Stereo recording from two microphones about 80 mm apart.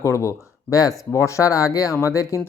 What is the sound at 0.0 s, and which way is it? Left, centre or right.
Speech, left.